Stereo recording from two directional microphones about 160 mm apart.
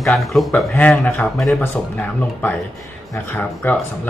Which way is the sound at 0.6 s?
10° left (ahead or behind).